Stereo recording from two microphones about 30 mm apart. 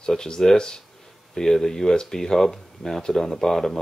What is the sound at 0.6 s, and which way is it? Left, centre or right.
Speech, left.